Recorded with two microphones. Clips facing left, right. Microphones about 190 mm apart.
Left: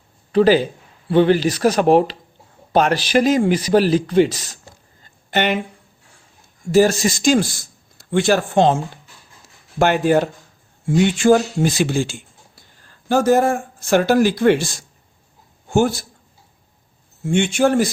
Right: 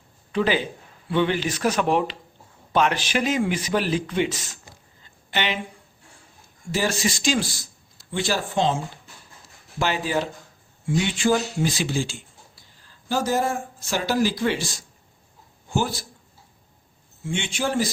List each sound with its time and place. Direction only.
0.3 s a man's voice: 40° left (ahead or behind)
5.3 s speech: 50° left (ahead or behind)
6.7 s a man's voice: 45° left (ahead or behind)
15.7 s a man's voice: 50° left (ahead or behind)
17.2 s a man's voice: 50° left (ahead or behind)